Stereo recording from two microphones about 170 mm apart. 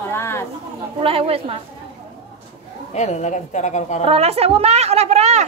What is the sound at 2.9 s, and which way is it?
A woman's voice, 45° left (ahead or behind).